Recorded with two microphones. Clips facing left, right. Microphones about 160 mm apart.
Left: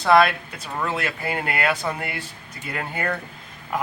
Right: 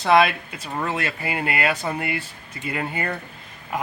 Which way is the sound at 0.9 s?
5° right (ahead or behind).